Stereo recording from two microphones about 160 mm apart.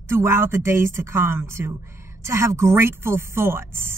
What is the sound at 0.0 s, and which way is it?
Speech, 15° right (ahead or behind).